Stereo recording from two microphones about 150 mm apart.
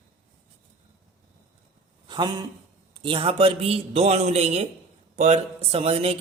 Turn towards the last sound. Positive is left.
turn(degrees=-40)  # may be behind; listen again after turning